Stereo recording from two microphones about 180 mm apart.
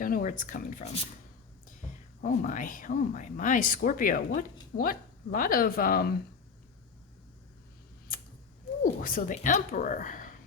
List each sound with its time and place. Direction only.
0.0 s speech: 50° left (ahead or behind)
2.2 s speech: 45° left (ahead or behind)
8.8 s speech: 50° left (ahead or behind)